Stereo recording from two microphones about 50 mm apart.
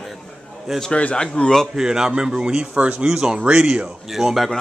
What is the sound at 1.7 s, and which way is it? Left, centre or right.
A man's voice, centre.